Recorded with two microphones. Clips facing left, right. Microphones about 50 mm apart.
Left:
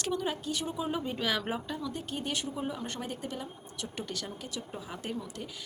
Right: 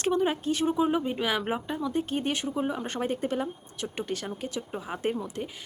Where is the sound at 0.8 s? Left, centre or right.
Right.